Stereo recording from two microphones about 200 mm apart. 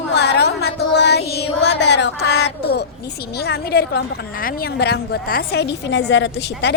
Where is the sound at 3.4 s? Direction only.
50° left (ahead or behind).